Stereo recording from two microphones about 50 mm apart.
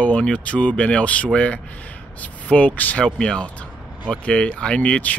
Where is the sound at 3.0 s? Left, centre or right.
Centre.